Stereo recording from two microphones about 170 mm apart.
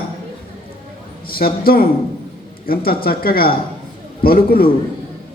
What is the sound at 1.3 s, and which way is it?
A man's voice, 60° left (ahead or behind).